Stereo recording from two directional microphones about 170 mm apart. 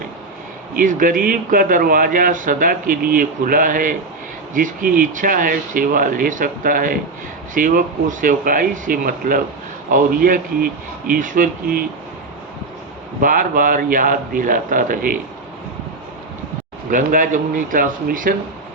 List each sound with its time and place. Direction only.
0.8 s a man's voice: 55° right (ahead or behind)
13.2 s a man's voice: 55° right (ahead or behind)
16.9 s a man's voice: 50° right (ahead or behind)